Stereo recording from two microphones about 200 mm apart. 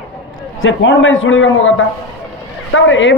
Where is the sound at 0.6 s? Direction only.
75° left (ahead or behind).